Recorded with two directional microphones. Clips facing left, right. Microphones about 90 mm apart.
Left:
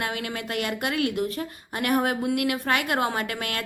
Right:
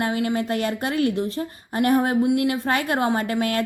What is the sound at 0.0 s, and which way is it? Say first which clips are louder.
A woman's voice: right 7 dB; 30° right (ahead or behind).